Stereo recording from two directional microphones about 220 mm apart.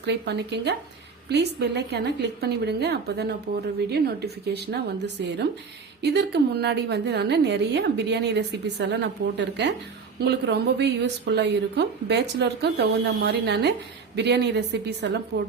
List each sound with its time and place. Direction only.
0.0 s a woman's voice: 50° right (ahead or behind)